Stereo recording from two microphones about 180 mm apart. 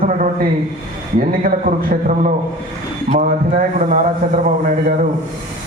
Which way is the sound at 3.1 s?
45° right (ahead or behind).